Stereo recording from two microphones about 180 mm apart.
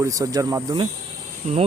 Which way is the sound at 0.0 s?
20° right (ahead or behind).